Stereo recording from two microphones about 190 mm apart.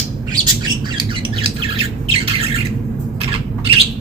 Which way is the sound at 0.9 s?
30° right (ahead or behind).